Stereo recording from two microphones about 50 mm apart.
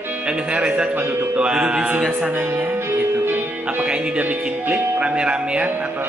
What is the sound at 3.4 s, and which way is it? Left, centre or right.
Music, right.